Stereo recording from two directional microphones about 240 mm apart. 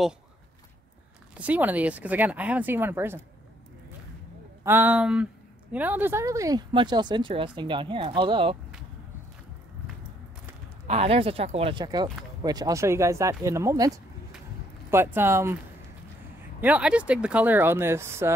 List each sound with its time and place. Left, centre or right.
1.3 s speech: centre
4.6 s speech: centre
10.9 s speech: right
16.6 s speech: centre